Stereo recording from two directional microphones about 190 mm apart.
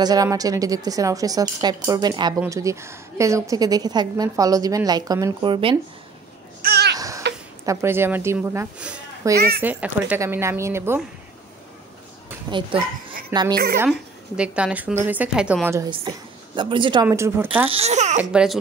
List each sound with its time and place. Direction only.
0.0 s a woman's voice: 20° right (ahead or behind)
6.6 s a sound: 60° right (ahead or behind)
7.0 s baby cry: 15° right (ahead or behind)
7.6 s speech: 15° right (ahead or behind)
12.4 s a woman's voice: 25° right (ahead or behind)
13.8 s speech: 5° right (ahead or behind)
16.5 s a woman's voice: 25° right (ahead or behind)
17.6 s a child's voice: 35° right (ahead or behind)
18.3 s speech: 5° right (ahead or behind)